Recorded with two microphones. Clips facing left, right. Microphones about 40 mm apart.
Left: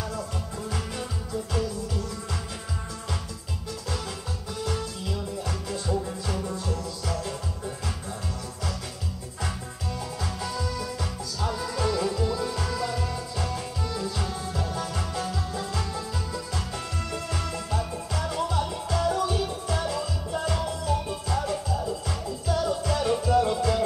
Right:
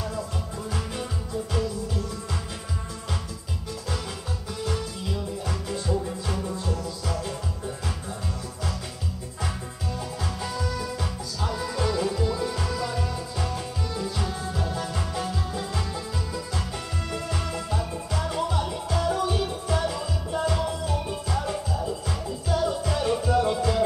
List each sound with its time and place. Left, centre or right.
5.5 s music: centre
11.4 s music: centre
17.1 s music: centre